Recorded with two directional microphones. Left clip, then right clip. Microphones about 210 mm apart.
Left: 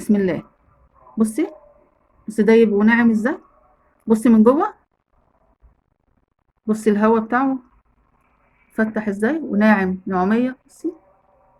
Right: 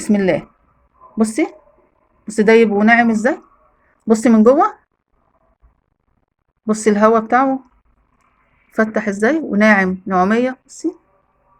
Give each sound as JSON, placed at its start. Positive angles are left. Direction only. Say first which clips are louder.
{"t": 0.0, "sound": "a woman's voice", "louder": "right 4 dB", "side_deg": -30}
{"t": 6.7, "sound": "a woman's voice", "louder": "right 4 dB", "side_deg": -30}
{"t": 8.7, "sound": "a woman's voice", "louder": "right 5 dB", "side_deg": -30}